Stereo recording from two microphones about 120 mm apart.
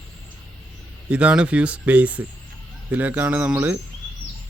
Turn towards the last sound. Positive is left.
turn(degrees=-15)  # may be behind; listen again after turning